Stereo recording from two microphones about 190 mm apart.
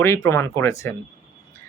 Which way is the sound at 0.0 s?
15° left (ahead or behind).